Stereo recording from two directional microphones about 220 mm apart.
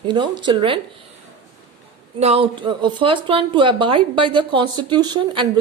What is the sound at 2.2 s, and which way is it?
Speech, 25° right (ahead or behind).